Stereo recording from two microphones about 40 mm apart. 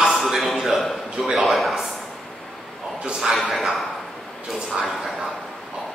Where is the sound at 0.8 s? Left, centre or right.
Centre.